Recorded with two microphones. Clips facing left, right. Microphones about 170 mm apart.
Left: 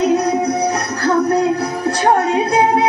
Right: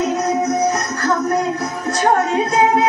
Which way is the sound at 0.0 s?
35° left (ahead or behind).